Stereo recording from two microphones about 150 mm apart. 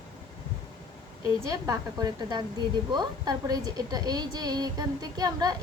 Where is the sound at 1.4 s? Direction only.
25° right (ahead or behind).